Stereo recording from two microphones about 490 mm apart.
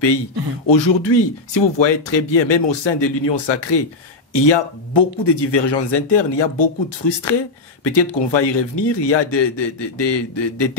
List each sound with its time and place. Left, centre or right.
0.7 s speech: left